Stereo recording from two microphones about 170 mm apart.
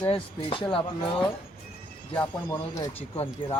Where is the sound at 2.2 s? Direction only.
10° left (ahead or behind).